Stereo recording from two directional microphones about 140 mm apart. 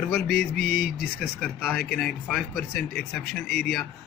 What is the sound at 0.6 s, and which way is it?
Speech, 90° left.